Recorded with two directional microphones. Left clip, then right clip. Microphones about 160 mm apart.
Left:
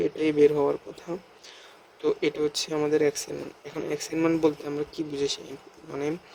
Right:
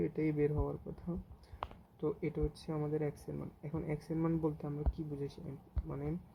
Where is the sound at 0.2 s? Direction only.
20° left (ahead or behind).